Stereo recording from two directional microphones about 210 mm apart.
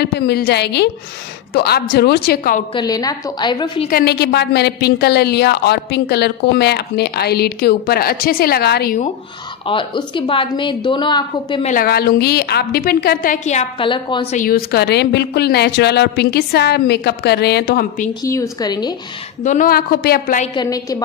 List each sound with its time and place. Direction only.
0.0 s a woman's voice: 50° left (ahead or behind)
2.7 s a woman's voice: 20° left (ahead or behind)
3.9 s a woman's voice: 50° left (ahead or behind)
9.7 s a woman's voice: 25° left (ahead or behind)
11.6 s a woman's voice: 40° left (ahead or behind); by 14.3 s 20° left (ahead or behind)
14.3 s a woman's voice: 40° left (ahead or behind)
18.2 s a woman's voice: 15° left (ahead or behind)
19.4 s a woman's voice: 40° left (ahead or behind)
20.5 s a woman's voice: 15° left (ahead or behind)